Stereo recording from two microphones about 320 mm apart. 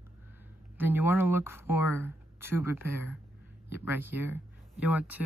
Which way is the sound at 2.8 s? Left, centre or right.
Left.